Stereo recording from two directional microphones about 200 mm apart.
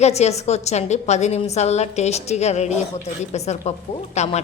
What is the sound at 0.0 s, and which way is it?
A woman's voice, 35° left (ahead or behind).